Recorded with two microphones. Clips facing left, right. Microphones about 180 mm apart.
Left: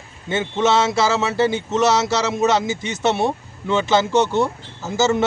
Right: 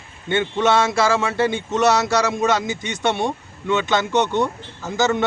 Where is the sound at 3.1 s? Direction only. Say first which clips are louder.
Left 2 dB; 5° left (ahead or behind).